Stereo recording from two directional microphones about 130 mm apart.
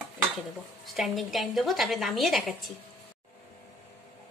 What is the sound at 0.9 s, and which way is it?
A woman's voice, centre (ahead or behind).